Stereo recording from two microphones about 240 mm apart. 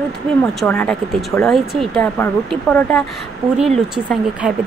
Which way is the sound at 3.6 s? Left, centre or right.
Centre.